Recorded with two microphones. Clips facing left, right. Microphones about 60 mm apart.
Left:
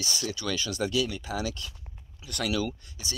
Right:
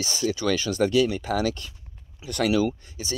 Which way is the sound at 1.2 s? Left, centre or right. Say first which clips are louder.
Right 7 dB; right.